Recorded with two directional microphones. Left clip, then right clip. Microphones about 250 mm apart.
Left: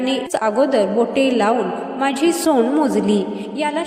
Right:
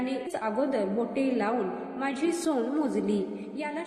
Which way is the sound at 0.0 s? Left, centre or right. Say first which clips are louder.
Left 12 dB; left.